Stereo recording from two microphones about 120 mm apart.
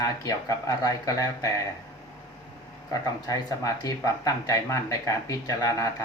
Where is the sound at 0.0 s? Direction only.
30° left (ahead or behind).